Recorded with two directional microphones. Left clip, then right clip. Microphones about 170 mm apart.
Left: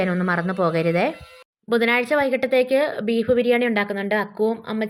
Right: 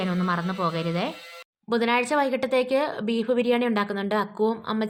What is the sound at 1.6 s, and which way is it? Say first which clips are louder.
Speech: left 4 dB; 10° left (ahead or behind).